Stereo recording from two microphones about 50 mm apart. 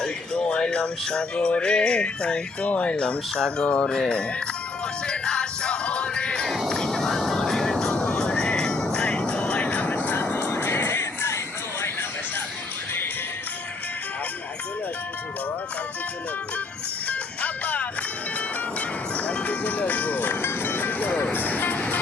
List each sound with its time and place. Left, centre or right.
0.0 s music: centre
5.0 s music: centre
6.7 s vehicle: centre
8.5 s music: centre; by 10.5 s left
10.5 s music: left
17.1 s music: left
19.1 s music: left
21.3 s vehicle: left